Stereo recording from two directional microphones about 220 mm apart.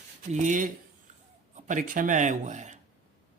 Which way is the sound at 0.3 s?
35° right (ahead or behind).